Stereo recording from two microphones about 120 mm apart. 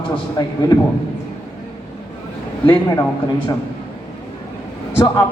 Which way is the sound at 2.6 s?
15° left (ahead or behind).